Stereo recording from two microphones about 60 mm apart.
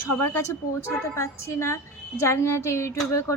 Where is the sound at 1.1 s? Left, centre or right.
Left.